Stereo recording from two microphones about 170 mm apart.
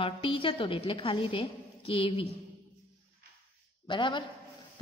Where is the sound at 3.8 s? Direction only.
30° left (ahead or behind).